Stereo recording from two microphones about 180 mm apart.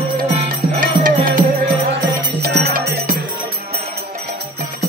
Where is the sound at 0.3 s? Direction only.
45° right (ahead or behind).